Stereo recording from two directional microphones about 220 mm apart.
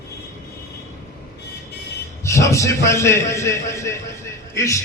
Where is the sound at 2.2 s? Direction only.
15° left (ahead or behind).